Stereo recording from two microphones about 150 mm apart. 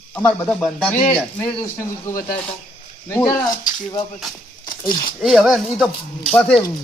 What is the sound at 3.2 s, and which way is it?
Speech, 25° left (ahead or behind).